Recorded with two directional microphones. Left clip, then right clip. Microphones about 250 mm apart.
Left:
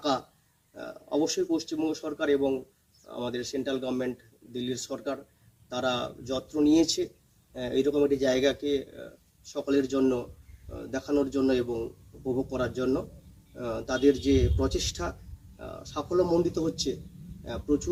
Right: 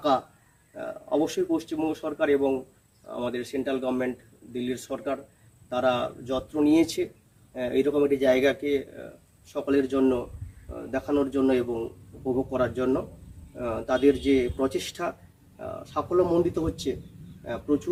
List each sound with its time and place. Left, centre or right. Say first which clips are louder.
0.0 s a man's voice: right 5 dB; centre